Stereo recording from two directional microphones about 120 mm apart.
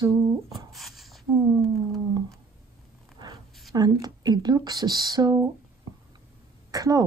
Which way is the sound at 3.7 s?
35° right (ahead or behind).